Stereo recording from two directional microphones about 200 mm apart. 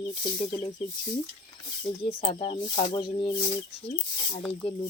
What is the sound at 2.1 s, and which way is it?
Speech, 30° left (ahead or behind).